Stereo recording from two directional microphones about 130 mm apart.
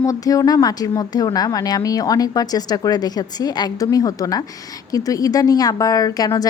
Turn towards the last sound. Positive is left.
turn(degrees=30)  # may be behind; listen again after turning